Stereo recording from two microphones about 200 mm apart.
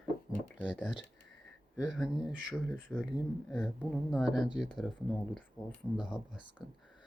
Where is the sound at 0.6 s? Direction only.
5° right (ahead or behind).